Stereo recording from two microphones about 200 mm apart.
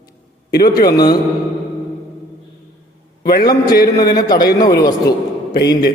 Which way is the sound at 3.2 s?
50° left (ahead or behind).